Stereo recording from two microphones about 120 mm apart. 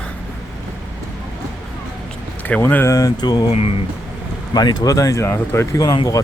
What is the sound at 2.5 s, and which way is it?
Speech, 15° left (ahead or behind).